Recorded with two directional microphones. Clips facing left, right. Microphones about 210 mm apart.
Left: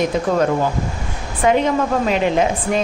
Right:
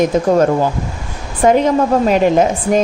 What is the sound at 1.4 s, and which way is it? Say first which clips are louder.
A woman's voice: right 4 dB; 45° right (ahead or behind).